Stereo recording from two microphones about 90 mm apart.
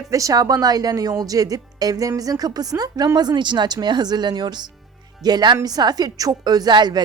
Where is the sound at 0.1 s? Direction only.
40° right (ahead or behind).